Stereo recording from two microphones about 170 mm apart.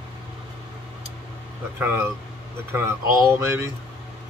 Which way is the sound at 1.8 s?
10° right (ahead or behind).